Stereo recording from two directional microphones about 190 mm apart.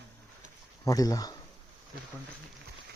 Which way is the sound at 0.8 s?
20° left (ahead or behind).